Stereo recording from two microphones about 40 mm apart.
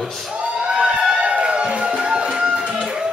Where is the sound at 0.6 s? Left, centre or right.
Right.